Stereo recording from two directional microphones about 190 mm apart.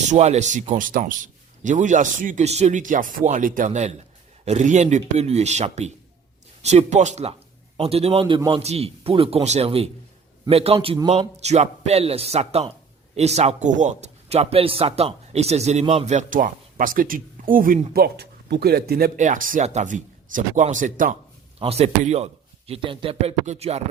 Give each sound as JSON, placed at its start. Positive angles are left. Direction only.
{"t": 0.1, "sound": "a man's voice", "side_deg": -35}
{"t": 21.6, "sound": "a man's voice", "side_deg": -35}